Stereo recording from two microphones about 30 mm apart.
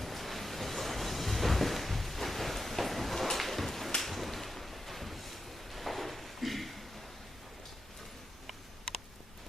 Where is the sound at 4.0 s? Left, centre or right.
Centre.